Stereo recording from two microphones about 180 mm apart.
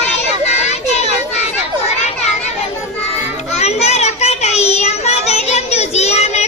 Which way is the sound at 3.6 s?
35° left (ahead or behind).